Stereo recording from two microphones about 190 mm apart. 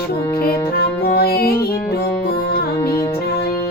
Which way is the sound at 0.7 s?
50° left (ahead or behind).